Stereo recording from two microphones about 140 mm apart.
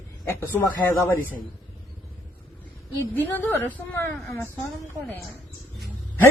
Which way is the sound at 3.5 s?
15° left (ahead or behind).